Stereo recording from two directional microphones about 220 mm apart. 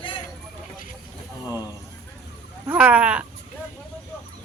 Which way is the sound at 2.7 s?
5° right (ahead or behind).